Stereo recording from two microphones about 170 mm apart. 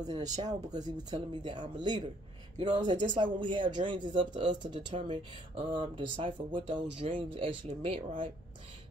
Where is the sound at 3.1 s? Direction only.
30° right (ahead or behind).